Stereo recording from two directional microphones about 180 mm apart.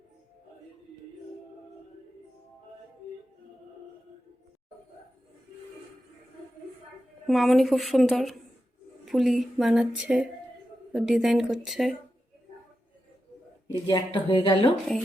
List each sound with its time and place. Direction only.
7.3 s speech: centre (ahead or behind)
13.8 s speech: 25° left (ahead or behind)